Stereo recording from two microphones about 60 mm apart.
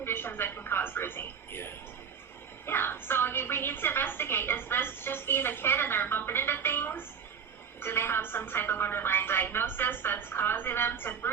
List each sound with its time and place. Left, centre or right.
0.0 s a woman's voice: left